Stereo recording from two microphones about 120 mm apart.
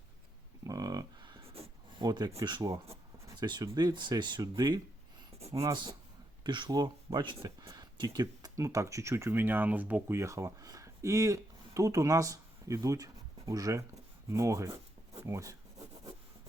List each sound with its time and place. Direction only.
0.6 s livestock: 30° right (ahead or behind)
2.0 s speech: 35° right (ahead or behind)
5.5 s speech: 25° right (ahead or behind)
6.4 s speech: 40° right (ahead or behind)
7.6 s a sound: 30° right (ahead or behind)
7.9 s speech: 35° right (ahead or behind); by 10.2 s 15° right (ahead or behind)
10.2 s speech: 25° right (ahead or behind)